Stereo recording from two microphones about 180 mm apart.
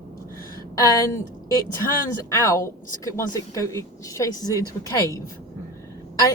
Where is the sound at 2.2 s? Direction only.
15° left (ahead or behind).